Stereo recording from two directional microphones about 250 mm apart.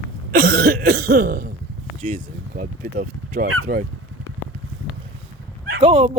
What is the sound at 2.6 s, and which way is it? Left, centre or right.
Speech, right.